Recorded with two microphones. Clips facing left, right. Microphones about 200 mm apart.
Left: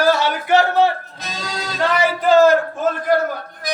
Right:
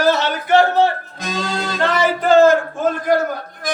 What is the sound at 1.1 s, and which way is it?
Music, 50° right (ahead or behind).